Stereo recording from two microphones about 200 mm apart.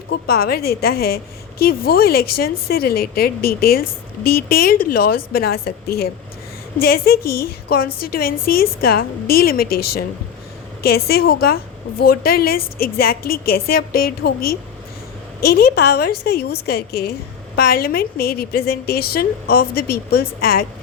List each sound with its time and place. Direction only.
0.1 s a woman's voice: 50° left (ahead or behind)
10.8 s a woman's voice: 50° left (ahead or behind)